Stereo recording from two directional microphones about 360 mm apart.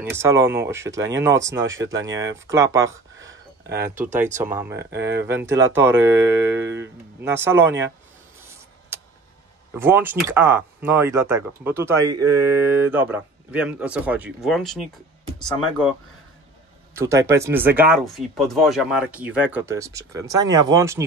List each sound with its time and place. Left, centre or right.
0.1 s speech: centre
1.6 s speech: right
2.0 s speech: centre
3.3 s a sound: right
3.8 s speech: centre
4.9 s speech: right
5.2 s speech: centre
8.9 s a sound: centre
9.8 s speech: centre
16.9 s speech: centre